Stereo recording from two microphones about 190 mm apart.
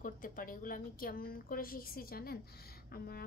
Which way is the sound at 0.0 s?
50° left (ahead or behind).